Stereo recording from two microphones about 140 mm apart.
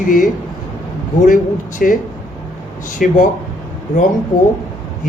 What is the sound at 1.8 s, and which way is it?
Speech, 85° left.